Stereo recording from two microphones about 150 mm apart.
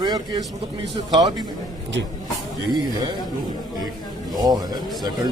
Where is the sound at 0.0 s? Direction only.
30° right (ahead or behind).